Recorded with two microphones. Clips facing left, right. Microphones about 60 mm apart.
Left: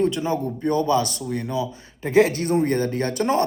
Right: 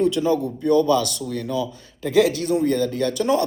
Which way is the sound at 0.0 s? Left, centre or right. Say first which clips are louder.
Right 3 dB; left.